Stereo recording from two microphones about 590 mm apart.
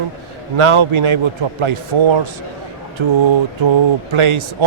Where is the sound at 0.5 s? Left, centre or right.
Right.